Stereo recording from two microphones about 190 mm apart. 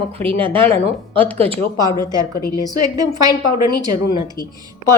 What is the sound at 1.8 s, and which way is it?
Speech, 20° left (ahead or behind).